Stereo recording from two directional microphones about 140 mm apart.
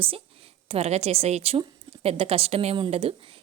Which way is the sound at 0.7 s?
50° right (ahead or behind).